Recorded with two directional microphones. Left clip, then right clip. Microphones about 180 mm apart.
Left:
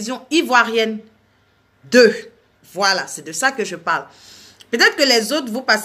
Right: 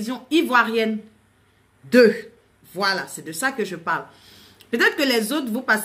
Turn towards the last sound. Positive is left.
turn(degrees=-15)  # may be behind; listen again after turning